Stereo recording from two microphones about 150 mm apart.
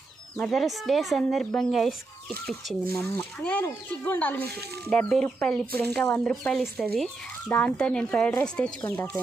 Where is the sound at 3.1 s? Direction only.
10° left (ahead or behind).